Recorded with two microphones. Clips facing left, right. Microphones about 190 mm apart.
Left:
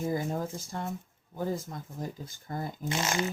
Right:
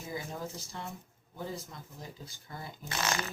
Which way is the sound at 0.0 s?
50° left (ahead or behind).